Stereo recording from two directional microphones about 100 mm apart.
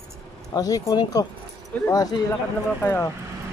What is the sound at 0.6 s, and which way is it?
Speech, 40° left (ahead or behind).